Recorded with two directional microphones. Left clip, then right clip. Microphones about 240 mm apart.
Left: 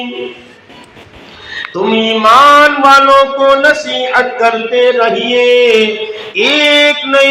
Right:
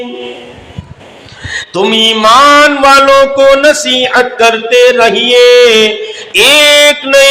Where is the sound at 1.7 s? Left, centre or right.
Right.